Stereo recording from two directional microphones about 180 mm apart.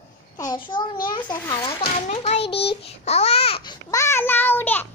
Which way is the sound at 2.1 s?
35° left (ahead or behind).